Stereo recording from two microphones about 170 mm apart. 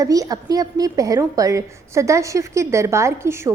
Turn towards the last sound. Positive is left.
turn(degrees=-15)  # may be behind; listen again after turning